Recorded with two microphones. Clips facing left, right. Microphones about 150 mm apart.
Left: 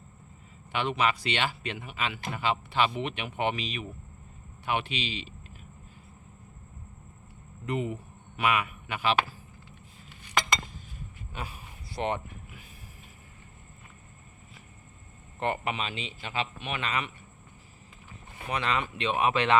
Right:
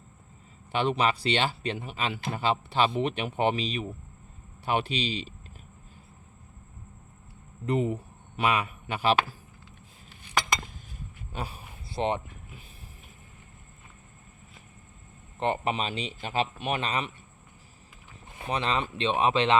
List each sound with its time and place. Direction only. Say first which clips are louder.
0.7 s speech: right 2 dB; 35° right (ahead or behind)
7.6 s a man's voice: right 4 dB; 35° right (ahead or behind)
11.3 s a sound: right 3 dB; 30° right (ahead or behind)
15.4 s speech: right 3 dB; 25° right (ahead or behind)
18.3 s speech: right 1 dB; 25° right (ahead or behind)